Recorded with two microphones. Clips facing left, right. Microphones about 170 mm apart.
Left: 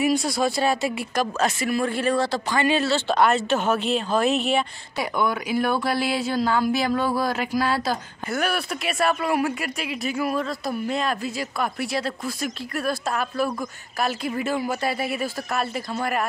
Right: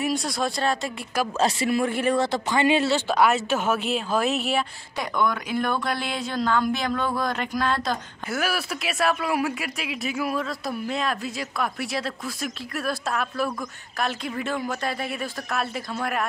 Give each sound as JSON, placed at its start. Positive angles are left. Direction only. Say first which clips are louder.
{"t": 0.0, "sound": "speech", "louder": "left 4 dB", "side_deg": 0}
{"t": 1.4, "sound": "speech", "louder": "right 3 dB", "side_deg": -25}
{"t": 3.1, "sound": "speech", "louder": "left 4 dB", "side_deg": -5}
{"t": 4.9, "sound": "speech", "louder": "left 1 dB", "side_deg": 5}